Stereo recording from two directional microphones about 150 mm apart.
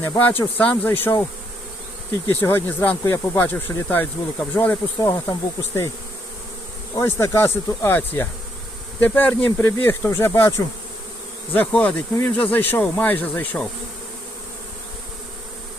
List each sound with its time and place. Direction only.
0.0 s speech: 15° left (ahead or behind)
2.3 s speech: 15° left (ahead or behind)
6.9 s speech: 20° left (ahead or behind)
11.5 s speech: 10° left (ahead or behind)